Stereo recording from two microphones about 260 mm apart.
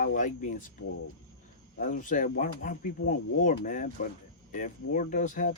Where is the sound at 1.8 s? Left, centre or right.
Left.